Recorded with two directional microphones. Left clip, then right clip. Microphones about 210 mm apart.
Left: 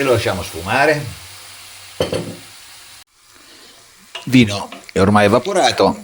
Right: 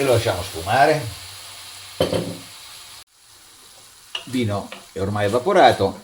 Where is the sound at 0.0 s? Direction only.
40° left (ahead or behind).